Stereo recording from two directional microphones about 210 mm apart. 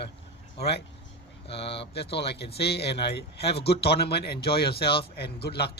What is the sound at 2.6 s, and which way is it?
Speech, 50° left (ahead or behind).